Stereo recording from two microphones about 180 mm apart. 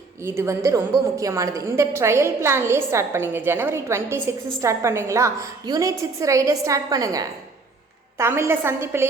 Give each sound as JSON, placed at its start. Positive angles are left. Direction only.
{"t": 0.2, "sound": "a woman's voice", "side_deg": -15}